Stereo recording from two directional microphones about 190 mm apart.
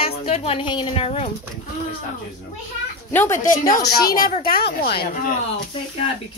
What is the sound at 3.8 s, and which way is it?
Speech, 50° left (ahead or behind).